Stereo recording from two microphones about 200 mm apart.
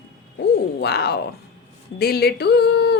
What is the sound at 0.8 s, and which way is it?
Speech, 55° left (ahead or behind).